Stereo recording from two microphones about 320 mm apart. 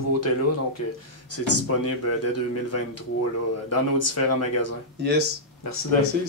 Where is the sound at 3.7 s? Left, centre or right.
Left.